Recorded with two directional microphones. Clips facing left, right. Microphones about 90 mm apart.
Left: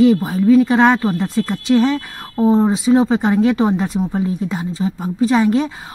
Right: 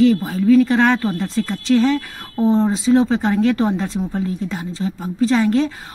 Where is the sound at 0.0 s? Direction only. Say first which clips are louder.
Left 2 dB; 20° left (ahead or behind).